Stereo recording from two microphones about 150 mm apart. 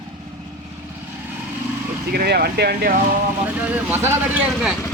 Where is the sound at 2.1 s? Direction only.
90° right.